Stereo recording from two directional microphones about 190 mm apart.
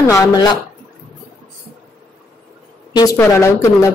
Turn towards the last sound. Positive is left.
turn(degrees=15)  # may be behind; listen again after turning